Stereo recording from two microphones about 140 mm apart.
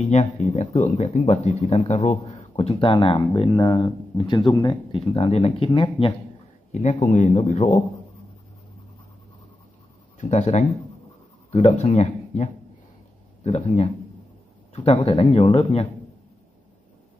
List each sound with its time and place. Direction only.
0.0 s speech: 55° left (ahead or behind)
2.7 s speech: 40° left (ahead or behind)
6.7 s a man's voice: 55° left (ahead or behind)
10.1 s speech: 55° left (ahead or behind)
14.7 s speech: 40° left (ahead or behind)